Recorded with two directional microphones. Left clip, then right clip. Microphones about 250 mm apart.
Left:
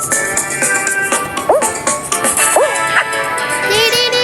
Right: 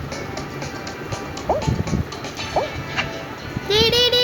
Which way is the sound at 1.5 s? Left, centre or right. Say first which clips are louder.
Left 10 dB; left.